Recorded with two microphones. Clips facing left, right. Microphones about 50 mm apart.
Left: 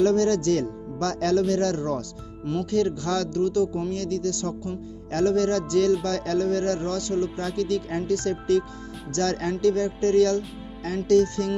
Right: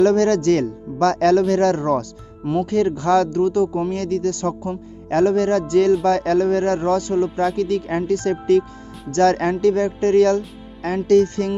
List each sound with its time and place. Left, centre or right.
0.0 s speech: right